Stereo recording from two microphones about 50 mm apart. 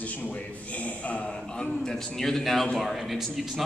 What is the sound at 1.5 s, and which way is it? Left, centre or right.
A man's voice, centre.